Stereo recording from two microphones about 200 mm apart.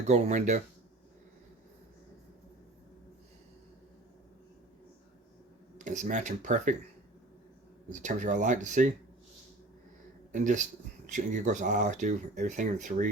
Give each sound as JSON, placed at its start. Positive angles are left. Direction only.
{"t": 0.1, "sound": "speech", "side_deg": -35}
{"t": 5.7, "sound": "speech", "side_deg": -40}
{"t": 7.9, "sound": "speech", "side_deg": -35}
{"t": 10.3, "sound": "speech", "side_deg": -40}